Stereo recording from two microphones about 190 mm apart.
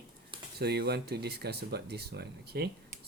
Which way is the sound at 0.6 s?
55° right (ahead or behind).